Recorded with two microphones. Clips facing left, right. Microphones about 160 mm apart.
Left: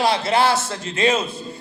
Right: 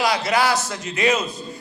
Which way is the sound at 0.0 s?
30° left (ahead or behind).